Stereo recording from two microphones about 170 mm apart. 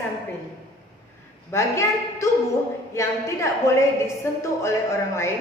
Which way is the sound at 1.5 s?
15° left (ahead or behind).